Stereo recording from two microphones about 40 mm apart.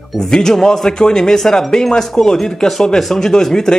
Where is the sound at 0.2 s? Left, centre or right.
Centre.